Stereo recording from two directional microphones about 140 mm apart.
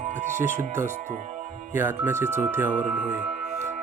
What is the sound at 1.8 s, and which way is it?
Speech, 15° right (ahead or behind).